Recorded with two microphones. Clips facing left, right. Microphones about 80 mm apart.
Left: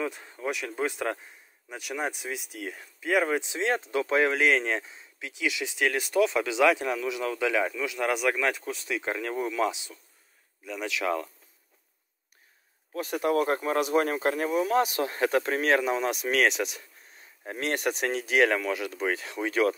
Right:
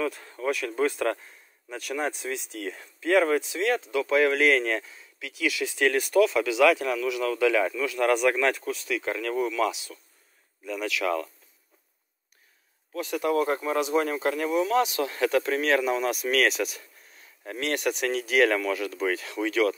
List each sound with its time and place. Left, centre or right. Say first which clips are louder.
0.0 s speech: right 3 dB; centre
8.6 s speech: right 2 dB; left
10.6 s speech: right 3 dB; centre
10.9 s speech: right 1 dB; left
12.9 s speech: even; left